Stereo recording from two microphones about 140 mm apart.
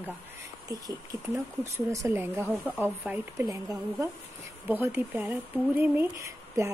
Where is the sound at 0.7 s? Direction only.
25° right (ahead or behind).